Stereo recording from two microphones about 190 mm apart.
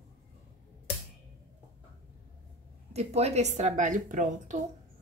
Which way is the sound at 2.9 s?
35° right (ahead or behind).